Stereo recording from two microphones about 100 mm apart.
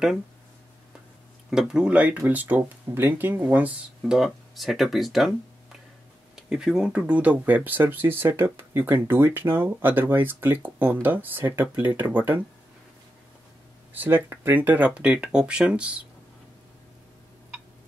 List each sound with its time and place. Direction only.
1.5 s speech: 5° right (ahead or behind)
4.0 s speech: 5° right (ahead or behind)
6.3 s speech: 5° right (ahead or behind)
13.9 s speech: 20° right (ahead or behind)